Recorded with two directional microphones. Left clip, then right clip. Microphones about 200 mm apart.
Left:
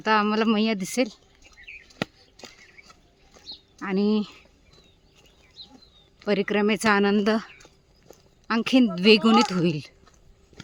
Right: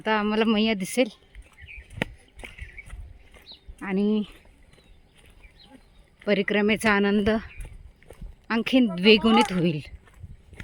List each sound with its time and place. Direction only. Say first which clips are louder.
0.0 s speech: left 2 dB; centre (ahead or behind)
3.8 s speech: left 1 dB; centre (ahead or behind)
6.2 s speech: even; 5° right (ahead or behind)
8.0 s a sound: left 2 dB; 5° right (ahead or behind)
9.0 s speech: even; centre (ahead or behind)